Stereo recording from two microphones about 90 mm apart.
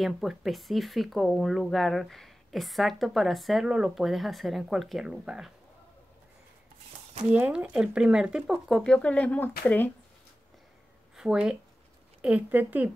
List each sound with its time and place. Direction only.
0.0 s speech: 5° right (ahead or behind)
7.3 s speech: 15° right (ahead or behind); by 9.8 s 20° left (ahead or behind)
11.1 s speech: 10° right (ahead or behind)